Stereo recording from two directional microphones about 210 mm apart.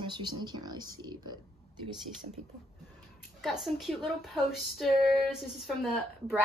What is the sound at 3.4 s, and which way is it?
Speech, centre (ahead or behind).